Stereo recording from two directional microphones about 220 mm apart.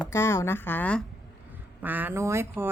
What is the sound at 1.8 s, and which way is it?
Speech, 10° right (ahead or behind).